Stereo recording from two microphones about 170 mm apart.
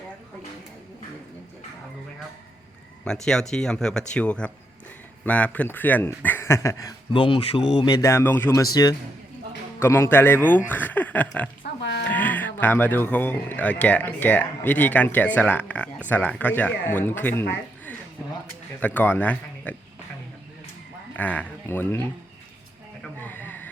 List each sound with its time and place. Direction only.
3.1 s speech: 5° left (ahead or behind)
7.1 s speech: 30° left (ahead or behind); by 11.4 s 10° left (ahead or behind)
11.8 s music: 90° left
12.0 s speech: 10° left (ahead or behind)
18.8 s speech: 10° left (ahead or behind)
21.2 s speech: 10° left (ahead or behind)
23.2 s a sound: 10° left (ahead or behind)